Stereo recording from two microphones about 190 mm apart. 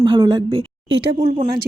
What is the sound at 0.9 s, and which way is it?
Speech, 65° right (ahead or behind).